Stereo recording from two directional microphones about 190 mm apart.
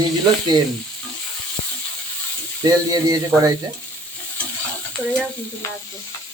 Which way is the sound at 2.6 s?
20° right (ahead or behind).